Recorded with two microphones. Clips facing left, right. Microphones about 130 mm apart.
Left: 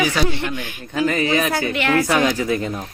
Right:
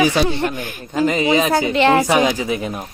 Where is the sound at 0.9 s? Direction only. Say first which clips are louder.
Right 3 dB; 20° right (ahead or behind).